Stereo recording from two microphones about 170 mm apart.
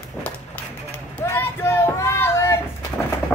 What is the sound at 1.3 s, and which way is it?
Child singing, 15° left (ahead or behind).